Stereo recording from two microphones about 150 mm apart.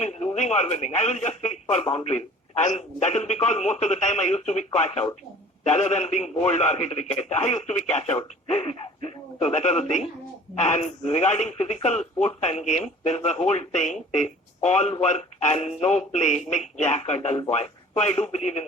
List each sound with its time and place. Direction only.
0.0 s speech: 45° left (ahead or behind)